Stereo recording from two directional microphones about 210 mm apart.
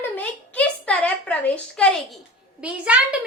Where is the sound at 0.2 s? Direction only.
5° left (ahead or behind).